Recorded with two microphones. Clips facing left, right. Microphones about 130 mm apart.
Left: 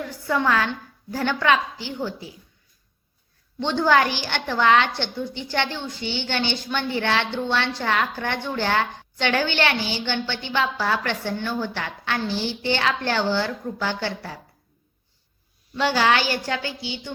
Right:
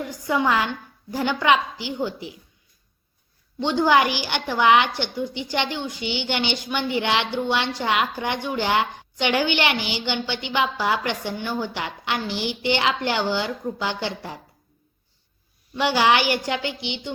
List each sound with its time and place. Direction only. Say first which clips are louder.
0.0 s a woman's voice: right 1 dB; 15° right (ahead or behind)
3.6 s a woman's voice: right 1 dB; 15° right (ahead or behind)
15.7 s a woman's voice: right 1 dB; 15° right (ahead or behind)